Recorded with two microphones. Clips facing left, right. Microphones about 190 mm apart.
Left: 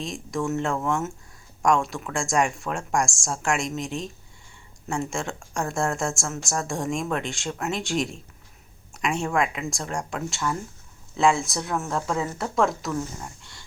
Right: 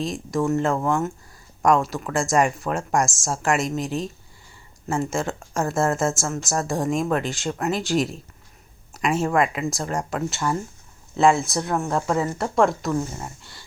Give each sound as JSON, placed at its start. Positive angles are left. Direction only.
{"t": 0.0, "sound": "speech", "side_deg": 0}
{"t": 12.9, "sound": "speech", "side_deg": -30}
{"t": 13.2, "sound": "speech", "side_deg": -5}